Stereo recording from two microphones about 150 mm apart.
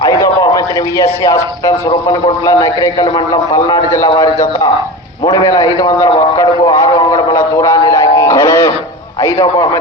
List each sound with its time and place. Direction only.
0.0 s a man's voice: 25° left (ahead or behind)